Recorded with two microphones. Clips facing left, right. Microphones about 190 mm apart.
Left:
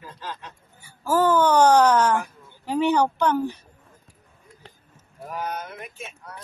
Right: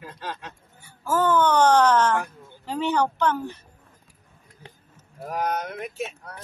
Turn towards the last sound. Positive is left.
turn(degrees=-70)  # may be behind; listen again after turning